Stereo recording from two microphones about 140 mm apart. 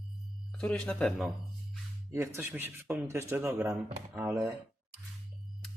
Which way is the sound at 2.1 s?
15° right (ahead or behind).